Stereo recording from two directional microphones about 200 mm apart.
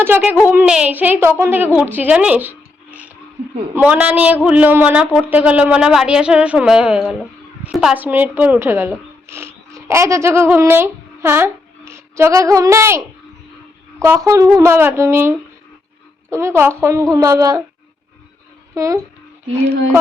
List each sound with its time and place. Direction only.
0.0 s a woman's voice: 10° right (ahead or behind)
3.8 s a woman's voice: 5° right (ahead or behind)
18.7 s a child's voice: 15° right (ahead or behind)